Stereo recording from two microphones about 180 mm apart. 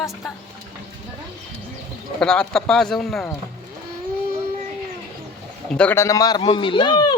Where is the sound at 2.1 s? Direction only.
5° left (ahead or behind).